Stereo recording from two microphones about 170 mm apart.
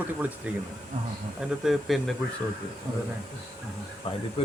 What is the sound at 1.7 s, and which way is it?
Speech, centre (ahead or behind).